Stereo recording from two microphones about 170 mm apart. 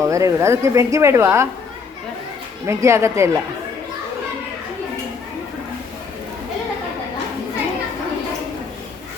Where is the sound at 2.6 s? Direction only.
15° right (ahead or behind).